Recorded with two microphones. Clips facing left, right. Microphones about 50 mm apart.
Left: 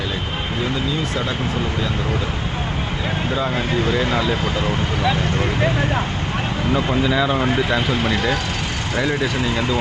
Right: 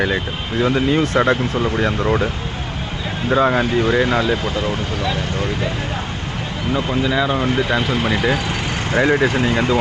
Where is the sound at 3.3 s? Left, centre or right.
Right.